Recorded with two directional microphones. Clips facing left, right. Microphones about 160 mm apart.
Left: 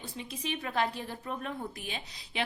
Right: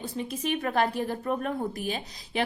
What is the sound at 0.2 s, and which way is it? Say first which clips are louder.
A woman's voice: right 7 dB; 50° right (ahead or behind).